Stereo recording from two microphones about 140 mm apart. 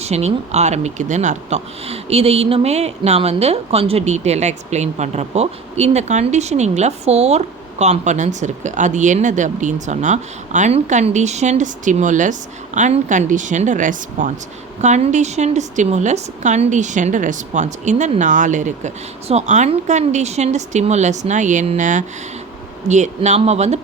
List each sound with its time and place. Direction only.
0.0 s speech: 50° right (ahead or behind); by 14.3 s 70° right (ahead or behind)
14.8 s speech: 55° right (ahead or behind)